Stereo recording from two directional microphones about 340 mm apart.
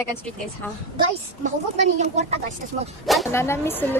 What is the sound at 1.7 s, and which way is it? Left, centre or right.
Speech, centre.